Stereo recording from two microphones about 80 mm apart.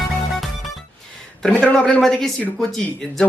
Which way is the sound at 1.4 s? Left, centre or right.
Centre.